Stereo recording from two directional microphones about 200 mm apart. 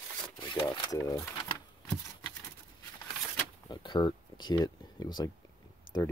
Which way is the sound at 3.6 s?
20° left (ahead or behind).